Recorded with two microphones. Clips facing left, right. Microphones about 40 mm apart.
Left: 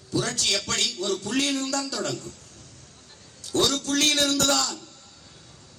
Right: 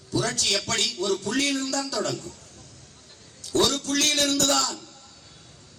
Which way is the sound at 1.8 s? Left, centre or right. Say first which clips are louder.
Right 2 dB; right.